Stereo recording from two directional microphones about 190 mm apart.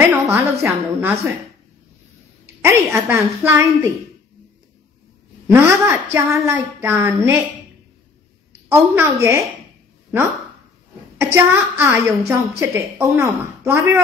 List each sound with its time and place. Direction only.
0.0 s a woman's voice: 15° right (ahead or behind)
2.4 s a woman's voice: 15° right (ahead or behind)
5.5 s a woman's voice: 10° right (ahead or behind)
8.9 s a woman's voice: 15° right (ahead or behind)
11.1 s a woman's voice: 10° right (ahead or behind)